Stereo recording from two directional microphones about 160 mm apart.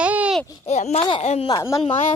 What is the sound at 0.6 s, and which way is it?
Speech, 45° left (ahead or behind).